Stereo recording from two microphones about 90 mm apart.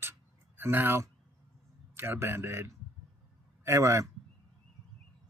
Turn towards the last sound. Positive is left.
turn(degrees=-35)  # may be behind; listen again after turning